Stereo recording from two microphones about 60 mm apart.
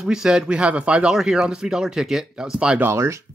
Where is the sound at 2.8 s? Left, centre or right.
Right.